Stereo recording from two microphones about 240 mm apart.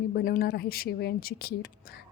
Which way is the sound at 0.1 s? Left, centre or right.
Left.